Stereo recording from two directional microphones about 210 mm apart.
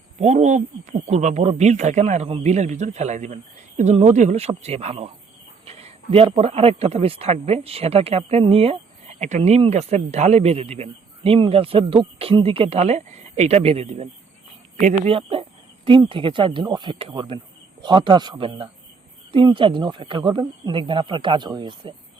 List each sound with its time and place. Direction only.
0.2 s a man's voice: 30° right (ahead or behind)